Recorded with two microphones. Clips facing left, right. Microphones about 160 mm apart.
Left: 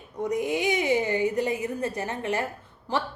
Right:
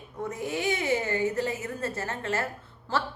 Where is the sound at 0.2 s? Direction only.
15° left (ahead or behind).